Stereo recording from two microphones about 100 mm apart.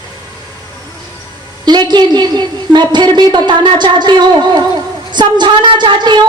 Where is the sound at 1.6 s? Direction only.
45° right (ahead or behind).